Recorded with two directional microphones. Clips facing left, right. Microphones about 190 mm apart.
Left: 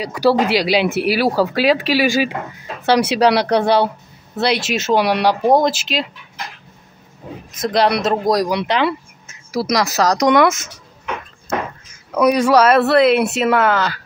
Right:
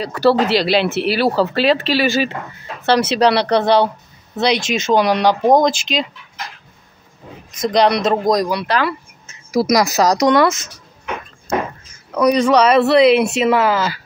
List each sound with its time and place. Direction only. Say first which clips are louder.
0.0 s speech: right 1 dB; 10° left (ahead or behind)
7.6 s speech: right 2 dB; 5° left (ahead or behind)
8.5 s speech: left 1 dB; 20° left (ahead or behind)
9.5 s speech: right 4 dB; 15° right (ahead or behind)
12.1 s speech: even; 5° left (ahead or behind)